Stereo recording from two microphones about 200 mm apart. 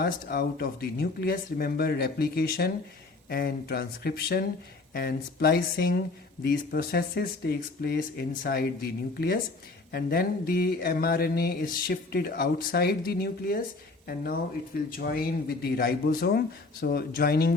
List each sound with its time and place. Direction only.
0.0 s mantra: 50° left (ahead or behind)
14.8 s mantra: 45° left (ahead or behind)